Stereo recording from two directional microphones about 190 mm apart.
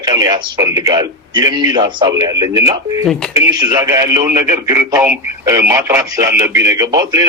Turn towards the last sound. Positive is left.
turn(degrees=-20)  # may be behind; listen again after turning